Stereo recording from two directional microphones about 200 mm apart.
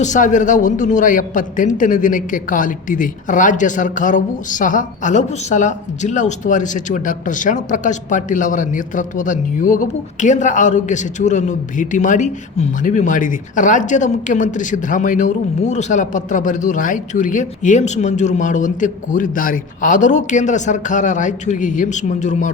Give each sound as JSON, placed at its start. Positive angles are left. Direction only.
{"t": 0.0, "sound": "a man's voice", "side_deg": 40}